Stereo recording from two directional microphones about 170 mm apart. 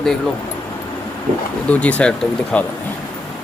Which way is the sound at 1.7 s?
10° left (ahead or behind).